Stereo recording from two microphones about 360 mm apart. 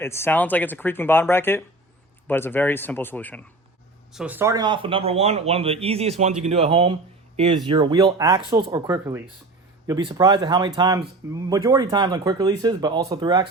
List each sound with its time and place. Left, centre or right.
0.0 s speech: centre